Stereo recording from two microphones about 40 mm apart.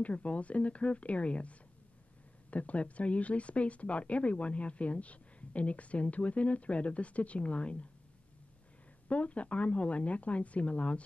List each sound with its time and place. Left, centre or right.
0.0 s speech: left
9.1 s speech: left